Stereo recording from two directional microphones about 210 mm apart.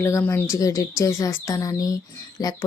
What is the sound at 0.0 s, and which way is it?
Speech, 15° left (ahead or behind).